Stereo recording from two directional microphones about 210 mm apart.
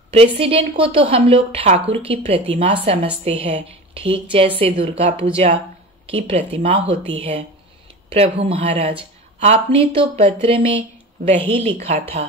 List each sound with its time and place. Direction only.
0.1 s a woman's voice: 25° right (ahead or behind)